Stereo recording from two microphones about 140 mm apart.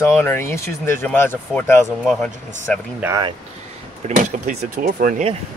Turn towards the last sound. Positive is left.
turn(degrees=-75)  # may be behind; listen again after turning